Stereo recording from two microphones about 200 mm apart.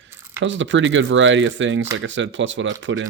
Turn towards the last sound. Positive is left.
turn(degrees=-70)  # may be behind; listen again after turning